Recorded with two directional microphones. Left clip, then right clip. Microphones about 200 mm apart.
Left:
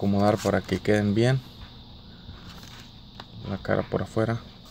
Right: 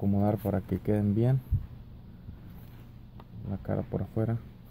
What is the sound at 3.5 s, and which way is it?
Speech, 10° left (ahead or behind).